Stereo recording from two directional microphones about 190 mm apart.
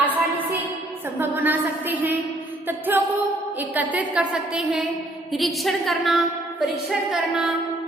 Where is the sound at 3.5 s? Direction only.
10° right (ahead or behind).